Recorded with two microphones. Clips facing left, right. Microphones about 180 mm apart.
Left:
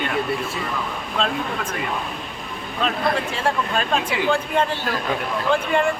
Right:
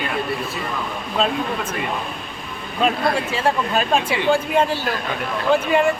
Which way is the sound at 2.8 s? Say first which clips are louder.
Right 3 dB; 10° right (ahead or behind).